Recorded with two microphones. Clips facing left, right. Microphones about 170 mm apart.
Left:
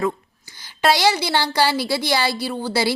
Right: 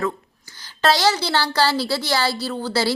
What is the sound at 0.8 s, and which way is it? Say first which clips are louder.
A woman's voice: left 1 dB; 10° left (ahead or behind).